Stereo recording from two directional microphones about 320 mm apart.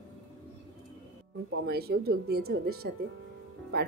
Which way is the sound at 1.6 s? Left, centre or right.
Right.